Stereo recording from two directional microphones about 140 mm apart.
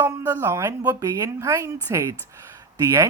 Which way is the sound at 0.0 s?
20° right (ahead or behind).